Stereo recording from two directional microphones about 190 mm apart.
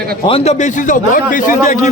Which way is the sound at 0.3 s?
30° left (ahead or behind).